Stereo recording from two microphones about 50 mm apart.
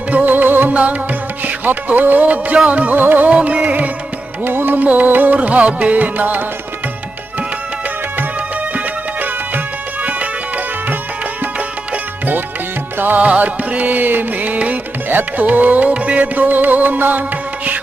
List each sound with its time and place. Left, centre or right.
0.1 s music: right
0.7 s music: right
3.2 s music: right
4.4 s music: right
5.4 s music: right
10.0 s music: right
13.1 s music: right